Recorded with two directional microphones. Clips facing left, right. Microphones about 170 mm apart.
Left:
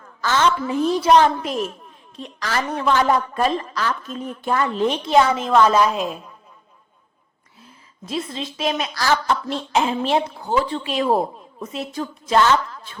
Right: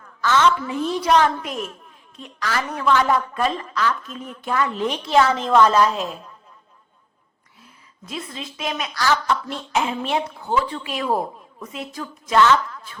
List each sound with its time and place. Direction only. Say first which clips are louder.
0.2 s speech: right 1 dB; 35° left (ahead or behind)
5.0 s a woman's voice: even; 15° left (ahead or behind)
8.0 s speech: left 5 dB; 30° left (ahead or behind)